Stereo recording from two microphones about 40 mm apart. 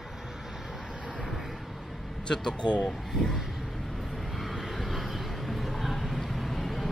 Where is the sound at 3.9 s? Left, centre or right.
Centre.